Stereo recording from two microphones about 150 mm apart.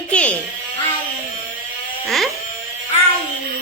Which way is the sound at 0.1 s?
10° left (ahead or behind).